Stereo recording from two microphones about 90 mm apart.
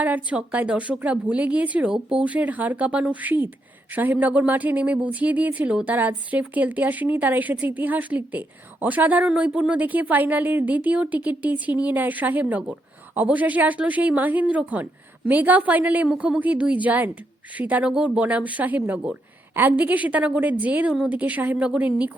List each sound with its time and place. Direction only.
0.0 s speech: 15° right (ahead or behind)